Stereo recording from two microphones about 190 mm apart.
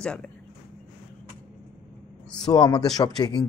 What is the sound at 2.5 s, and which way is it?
Speech, 20° left (ahead or behind).